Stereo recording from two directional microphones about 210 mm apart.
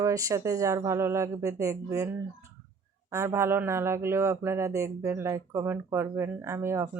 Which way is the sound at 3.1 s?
15° right (ahead or behind).